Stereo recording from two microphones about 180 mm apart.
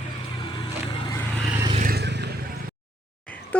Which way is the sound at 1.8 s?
65° right (ahead or behind).